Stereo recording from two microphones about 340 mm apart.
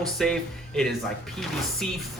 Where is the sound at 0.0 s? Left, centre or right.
Centre.